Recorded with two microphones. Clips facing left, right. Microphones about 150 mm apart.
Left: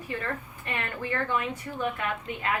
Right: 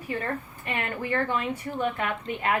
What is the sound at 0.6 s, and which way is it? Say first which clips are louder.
Speech: right 2 dB; 15° right (ahead or behind).